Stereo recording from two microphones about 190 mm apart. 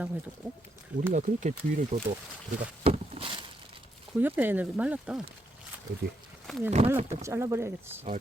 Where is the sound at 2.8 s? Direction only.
30° right (ahead or behind).